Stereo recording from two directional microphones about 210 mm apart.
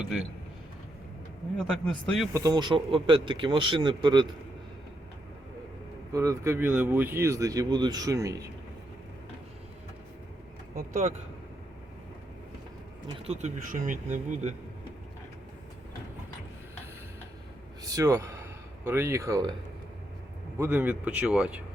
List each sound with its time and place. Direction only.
1.5 s a man's voice: 5° left (ahead or behind)
2.3 s speech: 15° right (ahead or behind)
6.1 s speech: 15° right (ahead or behind)
10.8 s speech: 35° right (ahead or behind)
13.1 s speech: 30° right (ahead or behind)
17.8 s a sound: 15° right (ahead or behind)
18.9 s speech: 10° right (ahead or behind)
20.6 s speech: 10° right (ahead or behind)